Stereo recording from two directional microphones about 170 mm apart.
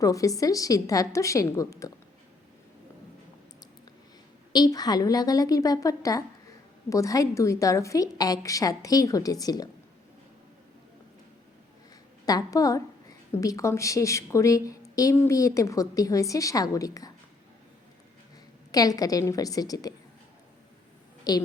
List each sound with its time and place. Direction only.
0.0 s a woman's voice: 20° left (ahead or behind)
4.5 s a woman's voice: 25° left (ahead or behind)
12.2 s a woman's voice: 20° left (ahead or behind)
18.7 s a woman's voice: 20° left (ahead or behind)
21.3 s a woman's voice: 25° left (ahead or behind)